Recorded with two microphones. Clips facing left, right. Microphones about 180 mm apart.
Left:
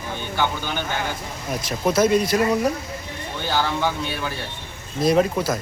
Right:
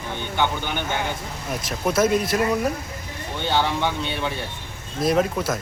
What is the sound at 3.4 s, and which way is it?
Speech, 20° right (ahead or behind).